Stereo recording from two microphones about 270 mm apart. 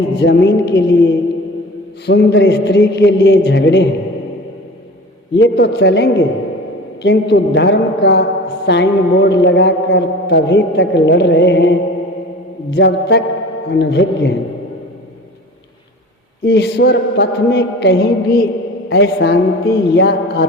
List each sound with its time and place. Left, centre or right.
0.2 s a man's voice: left
5.4 s a man's voice: left
16.4 s a man's voice: left